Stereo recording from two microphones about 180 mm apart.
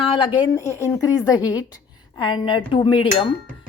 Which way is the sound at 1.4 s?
10° right (ahead or behind).